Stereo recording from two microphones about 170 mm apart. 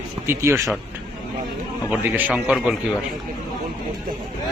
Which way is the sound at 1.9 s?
10° right (ahead or behind).